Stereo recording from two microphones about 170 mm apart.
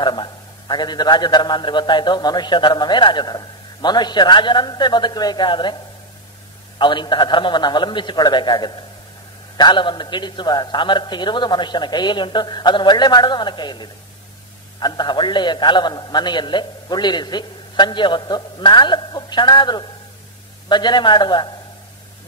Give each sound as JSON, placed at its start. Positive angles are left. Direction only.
{"t": 0.0, "sound": "a man's voice", "side_deg": 25}
{"t": 6.8, "sound": "a man's voice", "side_deg": 25}